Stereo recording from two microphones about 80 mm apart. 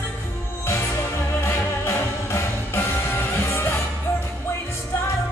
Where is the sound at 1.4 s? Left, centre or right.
Left.